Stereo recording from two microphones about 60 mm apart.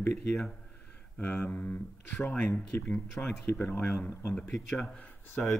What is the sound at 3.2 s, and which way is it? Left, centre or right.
Speech, centre.